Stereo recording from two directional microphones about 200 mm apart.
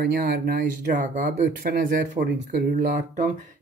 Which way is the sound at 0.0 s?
50° right (ahead or behind).